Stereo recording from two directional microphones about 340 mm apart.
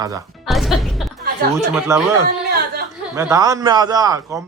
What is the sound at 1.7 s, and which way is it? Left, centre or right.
Speech, centre.